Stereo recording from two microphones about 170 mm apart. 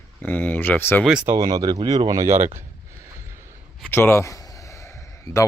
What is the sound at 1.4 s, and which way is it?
Speech, 20° right (ahead or behind).